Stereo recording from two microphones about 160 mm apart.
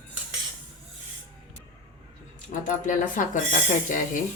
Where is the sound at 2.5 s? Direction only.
55° left (ahead or behind).